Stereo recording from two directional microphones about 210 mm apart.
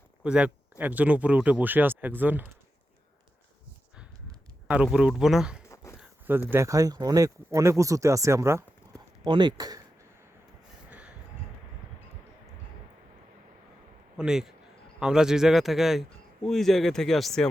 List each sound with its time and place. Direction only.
0.2 s speech: 5° right (ahead or behind)
4.7 s a man's voice: 5° right (ahead or behind)
5.6 s a sound: 15° left (ahead or behind)
6.0 s zipper: 10° right (ahead or behind)
6.5 s speech: 15° right (ahead or behind)
14.2 s a man's voice: 5° right (ahead or behind)